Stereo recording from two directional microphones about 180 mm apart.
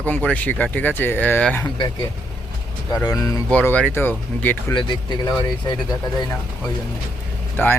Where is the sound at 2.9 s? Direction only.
20° left (ahead or behind).